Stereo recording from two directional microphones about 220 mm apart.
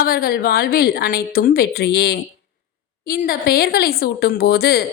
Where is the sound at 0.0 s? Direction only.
40° left (ahead or behind).